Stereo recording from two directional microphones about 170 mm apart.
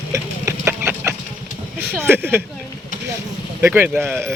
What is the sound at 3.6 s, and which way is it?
Speech, 10° right (ahead or behind).